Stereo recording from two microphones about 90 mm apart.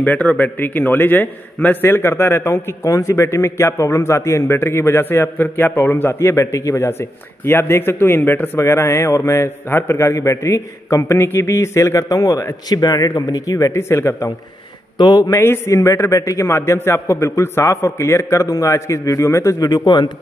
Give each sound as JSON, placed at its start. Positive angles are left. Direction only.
{"t": 0.0, "sound": "a man's voice", "side_deg": 15}
{"t": 15.0, "sound": "a man's voice", "side_deg": 50}
{"t": 15.4, "sound": "a man's voice", "side_deg": 25}
{"t": 19.7, "sound": "a man's voice", "side_deg": 50}